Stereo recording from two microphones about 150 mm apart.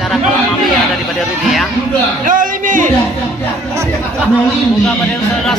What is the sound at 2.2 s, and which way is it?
Speech, 65° right (ahead or behind).